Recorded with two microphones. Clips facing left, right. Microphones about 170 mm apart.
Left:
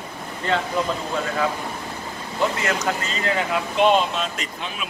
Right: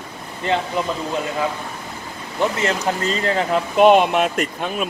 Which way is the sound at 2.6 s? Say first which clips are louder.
Right 3 dB; 35° right (ahead or behind).